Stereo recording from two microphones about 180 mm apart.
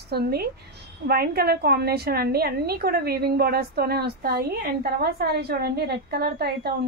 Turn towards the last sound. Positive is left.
turn(degrees=-60)  # may be behind; listen again after turning